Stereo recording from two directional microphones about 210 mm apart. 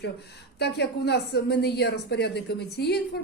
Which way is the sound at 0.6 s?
50° left (ahead or behind).